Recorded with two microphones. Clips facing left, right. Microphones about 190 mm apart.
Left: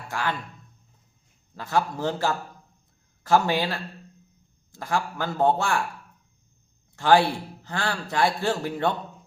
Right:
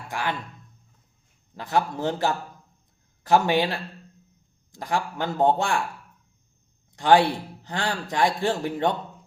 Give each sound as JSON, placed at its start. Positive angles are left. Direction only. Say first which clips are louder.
{"t": 0.1, "sound": "speech", "louder": "even", "side_deg": -15}
{"t": 1.5, "sound": "a man's voice", "louder": "right 1 dB", "side_deg": -20}
{"t": 6.9, "sound": "a man's voice", "louder": "right 1 dB", "side_deg": -15}